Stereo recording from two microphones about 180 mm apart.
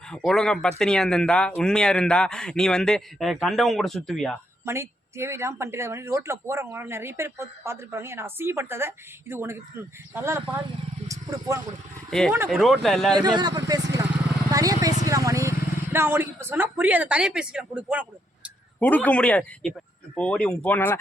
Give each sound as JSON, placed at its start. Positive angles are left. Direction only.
{"t": 0.1, "sound": "speech", "side_deg": 0}
{"t": 4.6, "sound": "speech", "side_deg": -15}
{"t": 12.5, "sound": "speech", "side_deg": 0}
{"t": 13.1, "sound": "speech", "side_deg": -25}
{"t": 18.8, "sound": "a man's voice", "side_deg": 10}